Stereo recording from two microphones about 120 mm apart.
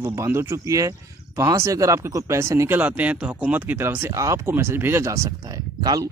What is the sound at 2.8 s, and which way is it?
Speech, 10° right (ahead or behind).